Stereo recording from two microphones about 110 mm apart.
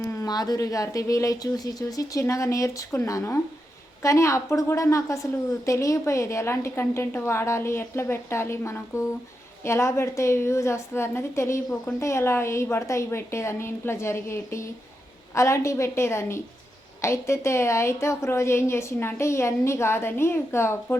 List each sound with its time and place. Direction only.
0.0 s a woman's voice: 30° left (ahead or behind)